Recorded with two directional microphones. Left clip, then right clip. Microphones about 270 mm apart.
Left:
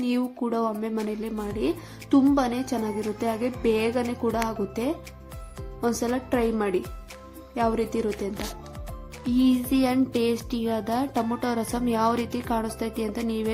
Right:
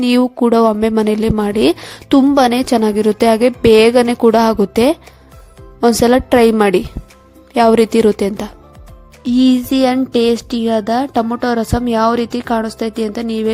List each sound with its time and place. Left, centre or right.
0.0 s speech: right